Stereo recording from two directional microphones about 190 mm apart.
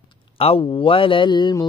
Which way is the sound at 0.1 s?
30° left (ahead or behind).